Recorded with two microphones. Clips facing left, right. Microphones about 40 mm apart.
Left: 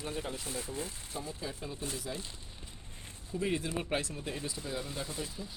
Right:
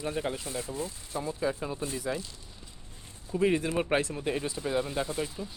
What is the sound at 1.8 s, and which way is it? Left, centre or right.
Speech, right.